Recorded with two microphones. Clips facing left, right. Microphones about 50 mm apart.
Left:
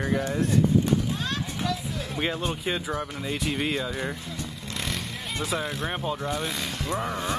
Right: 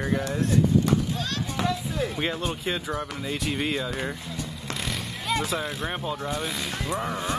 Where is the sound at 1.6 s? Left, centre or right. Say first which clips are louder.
Right 3 dB; right.